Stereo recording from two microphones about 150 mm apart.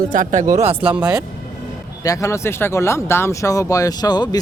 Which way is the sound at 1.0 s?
5° right (ahead or behind).